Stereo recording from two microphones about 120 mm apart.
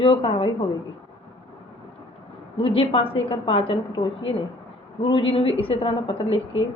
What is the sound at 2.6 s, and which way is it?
A woman's voice, 50° left (ahead or behind).